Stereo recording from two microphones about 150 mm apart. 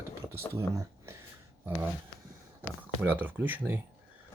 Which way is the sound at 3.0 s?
10° right (ahead or behind).